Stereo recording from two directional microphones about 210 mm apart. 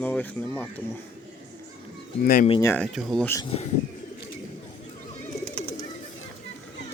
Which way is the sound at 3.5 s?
25° left (ahead or behind).